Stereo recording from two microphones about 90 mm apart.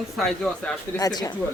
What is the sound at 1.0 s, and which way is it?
Speech, 45° left (ahead or behind).